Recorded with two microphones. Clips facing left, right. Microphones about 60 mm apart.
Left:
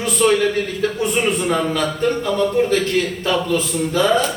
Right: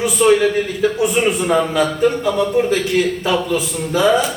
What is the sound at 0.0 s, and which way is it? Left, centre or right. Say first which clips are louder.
A man's voice: right 3 dB; centre.